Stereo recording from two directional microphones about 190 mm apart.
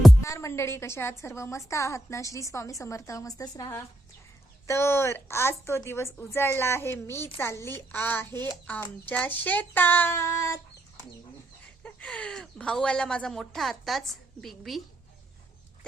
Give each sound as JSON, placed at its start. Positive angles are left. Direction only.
{"t": 0.2, "sound": "a woman's voice", "side_deg": 15}
{"t": 11.8, "sound": "speech", "side_deg": 5}